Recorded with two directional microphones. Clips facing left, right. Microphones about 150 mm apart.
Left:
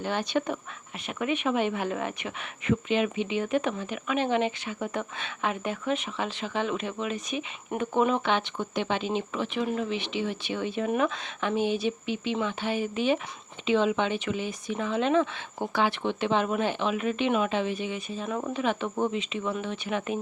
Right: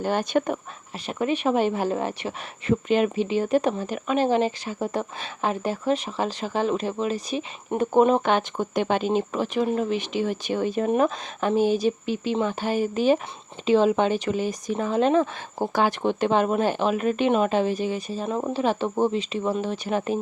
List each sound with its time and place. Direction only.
0.0 s speech: 45° right (ahead or behind)
1.0 s speech: 35° right (ahead or behind)